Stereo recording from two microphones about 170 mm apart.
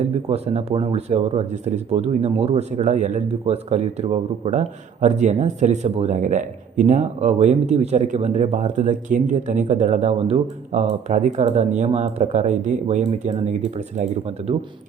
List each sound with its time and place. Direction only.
0.3 s speech: 40° right (ahead or behind)